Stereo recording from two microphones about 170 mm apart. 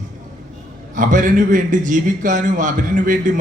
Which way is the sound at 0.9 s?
50° right (ahead or behind).